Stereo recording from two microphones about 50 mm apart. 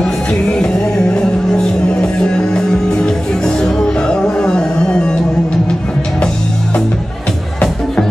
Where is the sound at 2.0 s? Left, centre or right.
Centre.